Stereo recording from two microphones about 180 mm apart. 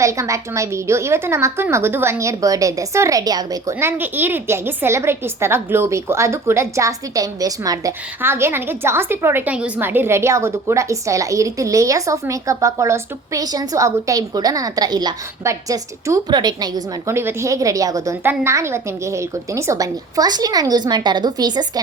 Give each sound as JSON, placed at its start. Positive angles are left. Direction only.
{"t": 0.0, "sound": "a woman's voice", "side_deg": -15}